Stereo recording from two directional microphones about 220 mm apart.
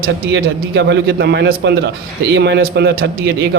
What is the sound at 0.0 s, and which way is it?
A man's voice, 45° right (ahead or behind).